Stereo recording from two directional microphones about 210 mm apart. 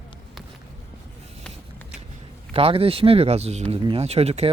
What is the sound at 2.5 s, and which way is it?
Speech, 25° right (ahead or behind).